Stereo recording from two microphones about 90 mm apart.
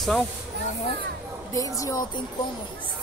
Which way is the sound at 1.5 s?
40° left (ahead or behind).